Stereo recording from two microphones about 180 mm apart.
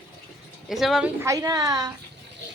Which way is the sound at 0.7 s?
Centre (ahead or behind).